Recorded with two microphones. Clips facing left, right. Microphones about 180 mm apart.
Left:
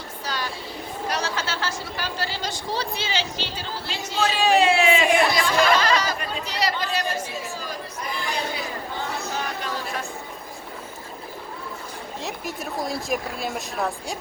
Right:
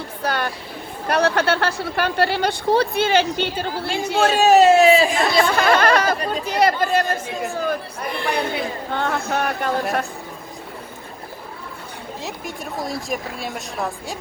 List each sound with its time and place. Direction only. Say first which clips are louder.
0.2 s a sound: right 7 dB; 60° right (ahead or behind)
1.0 s a woman's voice: right 10 dB; 60° right (ahead or behind); by 5.0 s 40° right (ahead or behind)
5.2 s a woman's voice: right 3 dB; 60° right (ahead or behind)
12.2 s speech: even; centre (ahead or behind)